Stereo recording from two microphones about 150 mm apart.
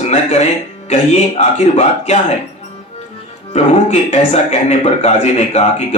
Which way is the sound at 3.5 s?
45° left (ahead or behind).